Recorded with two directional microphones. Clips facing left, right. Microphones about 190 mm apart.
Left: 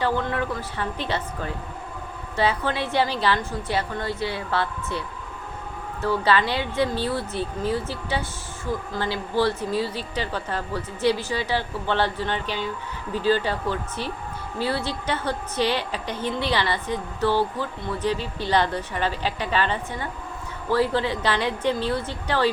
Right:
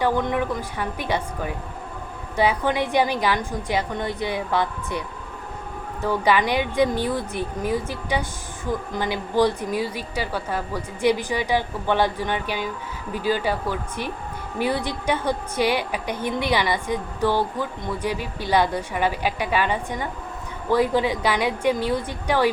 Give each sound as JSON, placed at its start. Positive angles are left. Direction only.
{"t": 0.0, "sound": "a woman's voice", "side_deg": -15}